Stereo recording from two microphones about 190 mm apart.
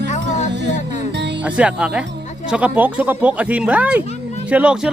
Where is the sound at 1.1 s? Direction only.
60° right (ahead or behind).